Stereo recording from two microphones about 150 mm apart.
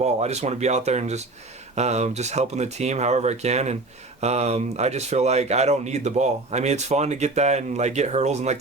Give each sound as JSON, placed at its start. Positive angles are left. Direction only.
{"t": 0.0, "sound": "speech", "side_deg": -45}